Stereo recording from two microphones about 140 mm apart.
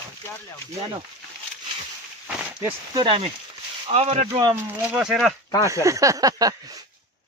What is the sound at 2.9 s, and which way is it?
Speech, 35° right (ahead or behind).